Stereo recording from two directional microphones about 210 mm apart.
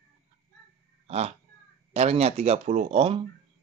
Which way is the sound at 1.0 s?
30° right (ahead or behind).